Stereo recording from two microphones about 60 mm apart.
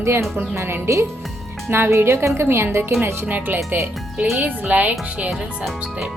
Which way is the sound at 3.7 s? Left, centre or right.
Right.